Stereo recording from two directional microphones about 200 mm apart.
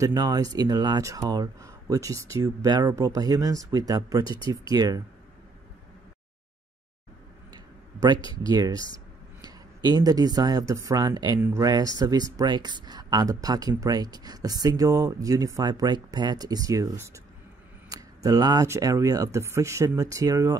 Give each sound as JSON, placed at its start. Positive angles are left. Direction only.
{"t": 0.0, "sound": "speech", "side_deg": -20}
{"t": 7.5, "sound": "a sound", "side_deg": -20}
{"t": 8.4, "sound": "speech", "side_deg": -20}